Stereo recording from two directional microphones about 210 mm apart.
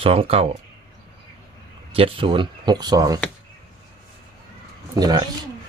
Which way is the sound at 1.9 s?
25° right (ahead or behind).